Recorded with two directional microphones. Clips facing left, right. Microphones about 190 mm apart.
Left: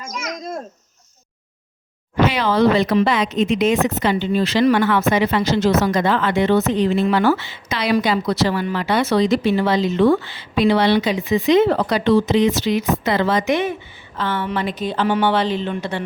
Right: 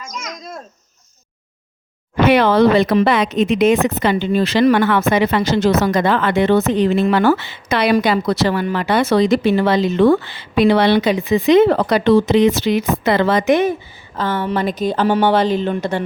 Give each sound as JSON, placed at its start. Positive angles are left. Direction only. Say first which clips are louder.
{"t": 2.2, "sound": "a woman's voice", "louder": "right 4 dB", "side_deg": -60}